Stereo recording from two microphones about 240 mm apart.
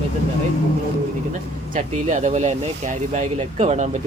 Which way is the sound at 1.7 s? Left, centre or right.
Right.